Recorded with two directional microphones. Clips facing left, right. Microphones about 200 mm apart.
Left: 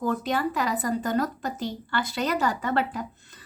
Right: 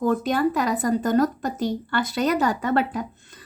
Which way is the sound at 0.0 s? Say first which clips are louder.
Right 5 dB; 50° right (ahead or behind).